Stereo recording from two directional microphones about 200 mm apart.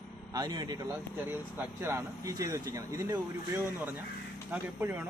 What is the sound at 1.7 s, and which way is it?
Speech, 15° right (ahead or behind).